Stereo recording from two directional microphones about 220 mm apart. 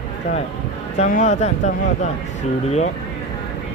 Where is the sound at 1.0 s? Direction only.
30° left (ahead or behind).